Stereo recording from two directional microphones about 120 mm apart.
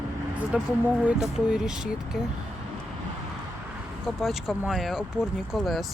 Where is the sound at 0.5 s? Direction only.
10° right (ahead or behind).